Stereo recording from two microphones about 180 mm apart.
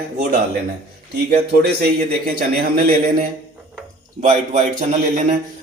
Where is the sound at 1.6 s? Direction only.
60° right (ahead or behind).